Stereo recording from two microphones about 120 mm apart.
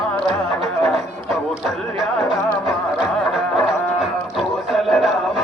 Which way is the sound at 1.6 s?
Centre (ahead or behind).